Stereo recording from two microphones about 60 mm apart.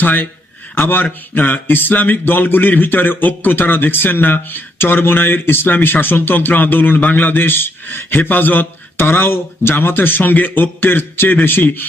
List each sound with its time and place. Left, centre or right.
0.0 s a man's voice: left